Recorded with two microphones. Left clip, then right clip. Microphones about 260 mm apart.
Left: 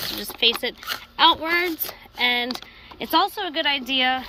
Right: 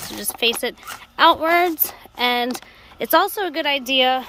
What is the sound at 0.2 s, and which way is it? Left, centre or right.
A woman's voice, centre.